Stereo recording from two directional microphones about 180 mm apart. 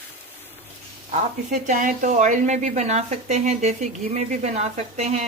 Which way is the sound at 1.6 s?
45° right (ahead or behind).